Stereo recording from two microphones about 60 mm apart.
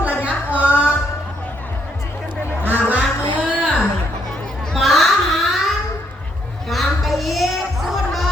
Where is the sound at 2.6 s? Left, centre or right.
Right.